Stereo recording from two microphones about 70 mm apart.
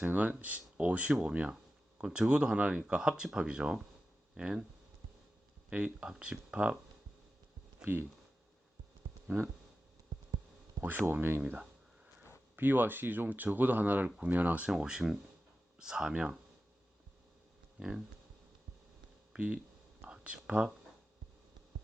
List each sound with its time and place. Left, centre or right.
0.0 s speech: right
5.7 s speech: centre
9.2 s speech: right
10.8 s speech: right
14.7 s speech: centre
17.7 s speech: centre
19.3 s a sound: centre
20.1 s speech: centre